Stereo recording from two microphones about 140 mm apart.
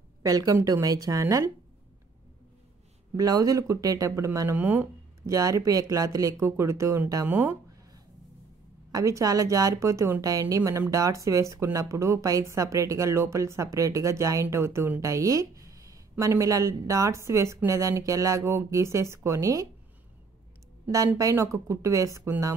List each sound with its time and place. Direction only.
0.2 s speech: 25° right (ahead or behind)
3.2 s speech: 25° right (ahead or behind)
5.2 s speech: 25° right (ahead or behind)
8.9 s speech: 25° right (ahead or behind)
21.2 s speech: 20° right (ahead or behind)